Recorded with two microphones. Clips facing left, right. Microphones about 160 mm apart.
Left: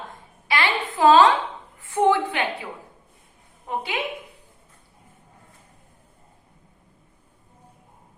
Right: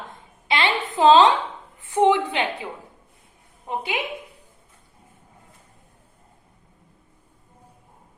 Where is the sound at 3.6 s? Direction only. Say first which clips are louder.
Right 1 dB; 15° right (ahead or behind).